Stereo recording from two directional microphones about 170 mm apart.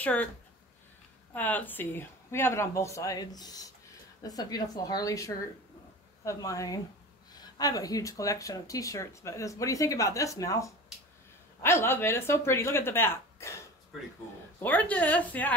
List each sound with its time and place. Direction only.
0.0 s speech: 10° left (ahead or behind)
1.3 s speech: 10° left (ahead or behind)
14.6 s speech: 10° left (ahead or behind)